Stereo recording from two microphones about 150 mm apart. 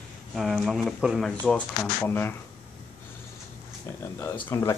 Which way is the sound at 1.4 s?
10° left (ahead or behind).